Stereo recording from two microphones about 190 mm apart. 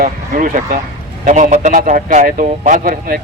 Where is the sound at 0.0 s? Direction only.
45° right (ahead or behind).